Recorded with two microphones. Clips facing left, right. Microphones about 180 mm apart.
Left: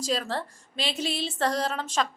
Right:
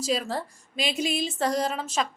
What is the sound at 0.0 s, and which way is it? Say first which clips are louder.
A woman's voice: right 1 dB; 10° right (ahead or behind).